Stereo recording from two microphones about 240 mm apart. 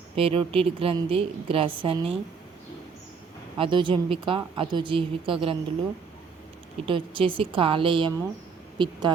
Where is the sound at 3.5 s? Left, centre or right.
Right.